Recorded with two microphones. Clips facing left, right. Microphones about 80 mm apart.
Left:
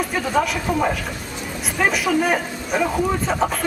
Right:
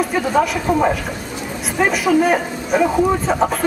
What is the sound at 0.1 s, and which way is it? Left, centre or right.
Speech, centre.